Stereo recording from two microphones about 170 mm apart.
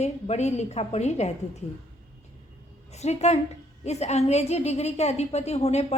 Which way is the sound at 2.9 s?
40° left (ahead or behind).